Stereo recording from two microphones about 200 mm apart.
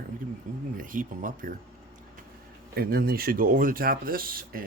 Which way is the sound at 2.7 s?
50° right (ahead or behind).